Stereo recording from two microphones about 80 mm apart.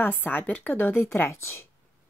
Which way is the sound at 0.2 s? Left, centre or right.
Left.